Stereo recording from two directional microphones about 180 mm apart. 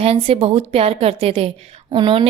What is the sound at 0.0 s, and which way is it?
A woman's voice, 30° right (ahead or behind).